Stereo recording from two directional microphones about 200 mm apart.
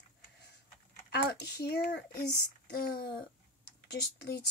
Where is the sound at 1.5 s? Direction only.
55° left (ahead or behind).